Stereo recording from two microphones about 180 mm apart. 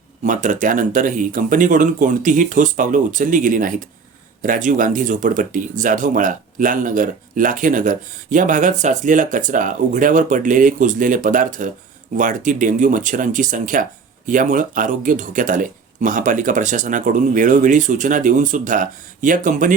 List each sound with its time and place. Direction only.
0.2 s speech: 45° right (ahead or behind)